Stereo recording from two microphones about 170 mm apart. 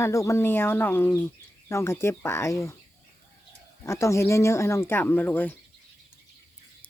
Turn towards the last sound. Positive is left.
turn(degrees=10)  # may be behind; listen again after turning